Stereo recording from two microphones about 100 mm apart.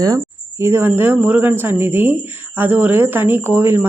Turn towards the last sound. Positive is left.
turn(degrees=-25)  # may be behind; listen again after turning